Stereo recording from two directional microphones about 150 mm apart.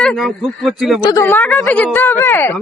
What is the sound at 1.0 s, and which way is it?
Speech, 25° left (ahead or behind).